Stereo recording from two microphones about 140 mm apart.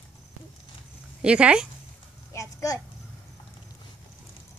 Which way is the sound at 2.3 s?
25° left (ahead or behind).